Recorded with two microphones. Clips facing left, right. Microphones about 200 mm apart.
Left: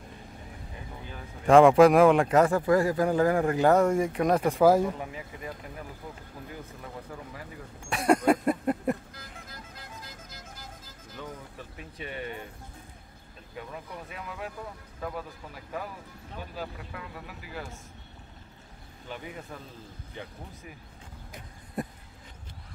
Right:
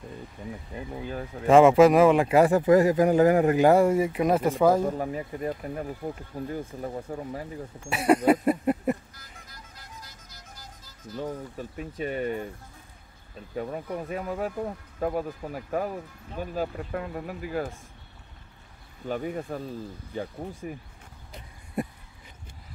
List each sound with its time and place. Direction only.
1.5 s speech: centre (ahead or behind)
4.8 s speech: 40° right (ahead or behind)
7.9 s a sound: 5° right (ahead or behind)
9.1 s music: 55° left (ahead or behind)
11.1 s speech: 40° right (ahead or behind)
13.6 s speech: 45° right (ahead or behind)
19.0 s speech: 45° right (ahead or behind)
20.6 s speech: 45° right (ahead or behind)